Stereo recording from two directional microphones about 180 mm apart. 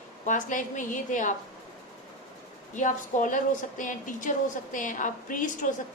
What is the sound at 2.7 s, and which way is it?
A woman's voice, 45° left (ahead or behind).